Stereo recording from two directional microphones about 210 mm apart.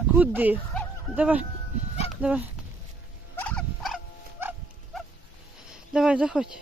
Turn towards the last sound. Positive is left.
turn(degrees=-5)  # may be behind; listen again after turning